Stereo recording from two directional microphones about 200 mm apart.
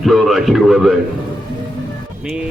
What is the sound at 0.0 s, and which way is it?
Speech, centre (ahead or behind).